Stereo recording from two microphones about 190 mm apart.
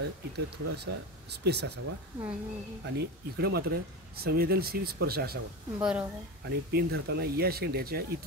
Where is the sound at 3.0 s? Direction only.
60° right (ahead or behind).